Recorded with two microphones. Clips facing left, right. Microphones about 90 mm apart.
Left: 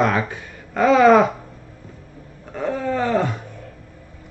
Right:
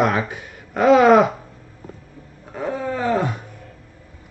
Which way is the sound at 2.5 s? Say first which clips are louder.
Left 2 dB; 10° right (ahead or behind).